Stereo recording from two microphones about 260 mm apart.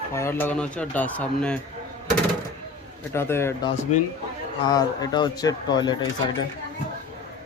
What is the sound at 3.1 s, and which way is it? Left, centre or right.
Speech, centre.